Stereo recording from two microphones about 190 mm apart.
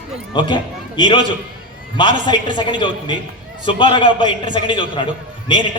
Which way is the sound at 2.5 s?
25° left (ahead or behind).